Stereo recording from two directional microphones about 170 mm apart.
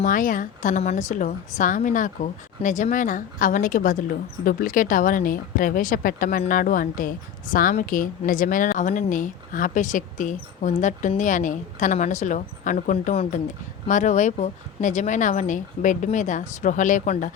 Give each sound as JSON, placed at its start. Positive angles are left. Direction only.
{"t": 0.0, "sound": "a woman's voice", "side_deg": 50}